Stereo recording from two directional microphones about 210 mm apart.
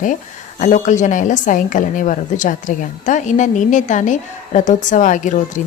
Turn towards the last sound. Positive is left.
turn(degrees=35)  # may be behind; listen again after turning